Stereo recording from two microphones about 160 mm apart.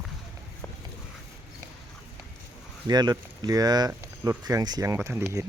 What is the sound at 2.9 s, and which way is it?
Speech, 25° right (ahead or behind).